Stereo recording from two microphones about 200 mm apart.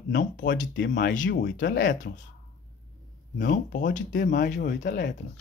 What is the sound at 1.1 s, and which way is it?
Speech, 40° left (ahead or behind).